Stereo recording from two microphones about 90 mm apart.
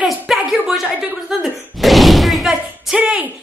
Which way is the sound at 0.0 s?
5° right (ahead or behind).